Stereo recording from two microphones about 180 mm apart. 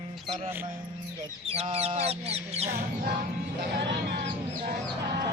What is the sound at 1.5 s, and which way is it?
Speech, 35° right (ahead or behind).